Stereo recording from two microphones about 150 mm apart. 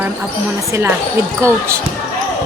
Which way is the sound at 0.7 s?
15° right (ahead or behind).